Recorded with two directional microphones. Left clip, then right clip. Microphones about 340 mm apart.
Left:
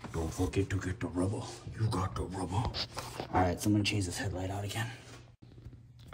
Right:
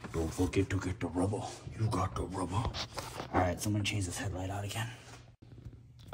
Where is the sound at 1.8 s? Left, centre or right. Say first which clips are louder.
Right 1 dB; centre.